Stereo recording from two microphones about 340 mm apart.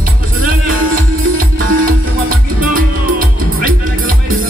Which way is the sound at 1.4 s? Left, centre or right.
Right.